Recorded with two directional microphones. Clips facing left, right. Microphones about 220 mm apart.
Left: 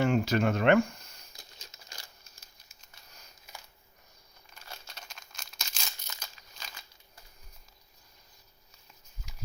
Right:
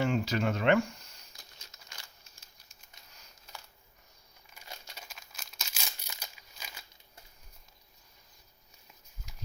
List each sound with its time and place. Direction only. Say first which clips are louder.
0.0 s speech: left 3 dB; 55° left (ahead or behind)
4.4 s crumpling: even; 10° right (ahead or behind)